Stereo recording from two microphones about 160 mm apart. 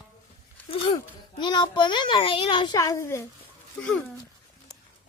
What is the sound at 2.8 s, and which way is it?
Speech, 20° left (ahead or behind).